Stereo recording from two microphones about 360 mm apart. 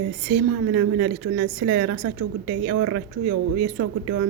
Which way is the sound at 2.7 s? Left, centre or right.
Right.